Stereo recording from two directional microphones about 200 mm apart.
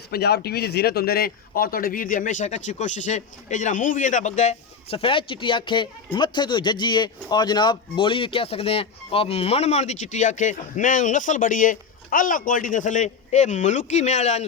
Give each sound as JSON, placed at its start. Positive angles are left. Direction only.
{"t": 0.1, "sound": "a man's voice", "side_deg": 55}